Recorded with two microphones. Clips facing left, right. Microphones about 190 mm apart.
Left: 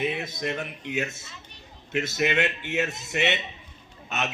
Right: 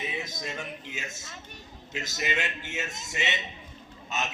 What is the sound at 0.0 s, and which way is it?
A man's voice, 60° left (ahead or behind).